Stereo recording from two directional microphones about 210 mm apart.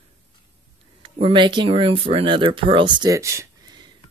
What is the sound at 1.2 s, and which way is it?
Speech, 20° right (ahead or behind).